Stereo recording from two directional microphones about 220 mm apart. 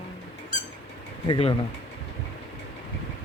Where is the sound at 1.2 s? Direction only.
20° left (ahead or behind).